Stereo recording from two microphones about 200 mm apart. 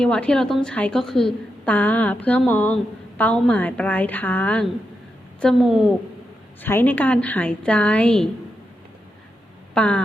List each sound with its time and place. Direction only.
0.0 s a woman's voice: 5° left (ahead or behind)
6.6 s a woman's voice: 10° left (ahead or behind)
9.7 s a woman's voice: 5° left (ahead or behind)